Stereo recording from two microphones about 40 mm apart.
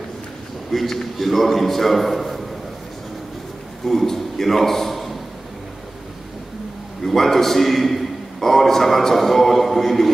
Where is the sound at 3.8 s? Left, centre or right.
Centre.